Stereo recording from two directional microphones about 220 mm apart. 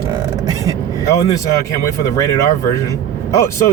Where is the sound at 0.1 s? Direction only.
15° right (ahead or behind).